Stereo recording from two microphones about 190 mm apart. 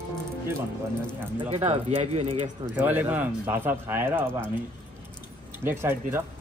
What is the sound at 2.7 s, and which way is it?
Speech, 10° right (ahead or behind).